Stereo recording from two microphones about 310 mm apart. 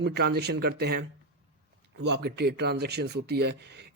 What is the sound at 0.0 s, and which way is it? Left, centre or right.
Speech, right.